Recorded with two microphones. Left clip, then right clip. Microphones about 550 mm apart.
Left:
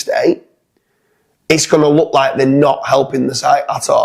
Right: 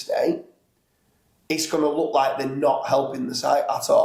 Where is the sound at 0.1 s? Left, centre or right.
Left.